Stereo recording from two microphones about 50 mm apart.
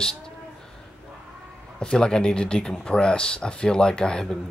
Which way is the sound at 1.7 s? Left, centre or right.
Centre.